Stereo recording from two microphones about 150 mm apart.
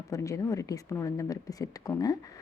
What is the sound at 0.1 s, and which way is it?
Speech, 20° left (ahead or behind).